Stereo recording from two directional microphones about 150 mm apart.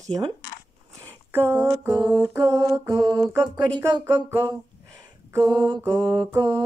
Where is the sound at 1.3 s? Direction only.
15° right (ahead or behind).